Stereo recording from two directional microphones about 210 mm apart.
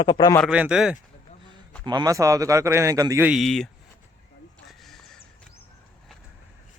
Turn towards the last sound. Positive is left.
turn(degrees=0)  # may be behind; listen again after turning